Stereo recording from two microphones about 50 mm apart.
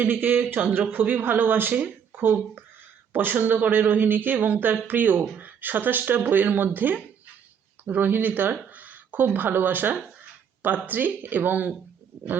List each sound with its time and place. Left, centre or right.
0.0 s speech: right
1.7 s a sound: right
2.2 s speech: right
3.3 s speech: right